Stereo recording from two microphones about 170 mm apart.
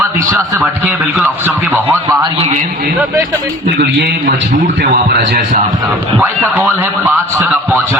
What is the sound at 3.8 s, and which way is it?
Speech, 90° right.